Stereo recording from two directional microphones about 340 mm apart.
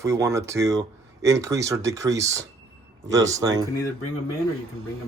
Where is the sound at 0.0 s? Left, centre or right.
Centre.